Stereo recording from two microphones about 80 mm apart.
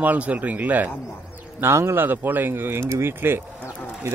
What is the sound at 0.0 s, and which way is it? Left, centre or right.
Speech, centre.